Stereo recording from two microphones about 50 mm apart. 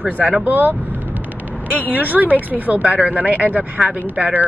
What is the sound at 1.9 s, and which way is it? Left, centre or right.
Speech, right.